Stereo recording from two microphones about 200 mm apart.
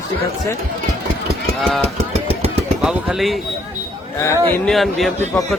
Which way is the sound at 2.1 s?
30° right (ahead or behind).